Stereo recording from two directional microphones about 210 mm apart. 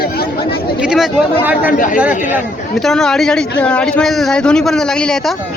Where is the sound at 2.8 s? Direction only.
Centre (ahead or behind).